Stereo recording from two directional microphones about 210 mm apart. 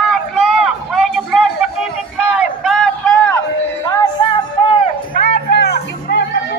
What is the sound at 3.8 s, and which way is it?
Music, 25° left (ahead or behind).